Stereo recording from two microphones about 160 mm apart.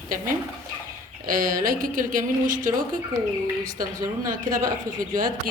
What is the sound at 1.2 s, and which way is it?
A woman's voice, 60° right (ahead or behind).